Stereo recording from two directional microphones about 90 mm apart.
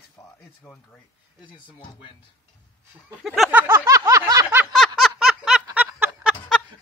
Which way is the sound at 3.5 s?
20° right (ahead or behind).